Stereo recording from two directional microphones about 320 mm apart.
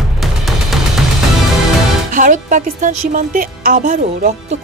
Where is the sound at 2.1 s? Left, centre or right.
Right.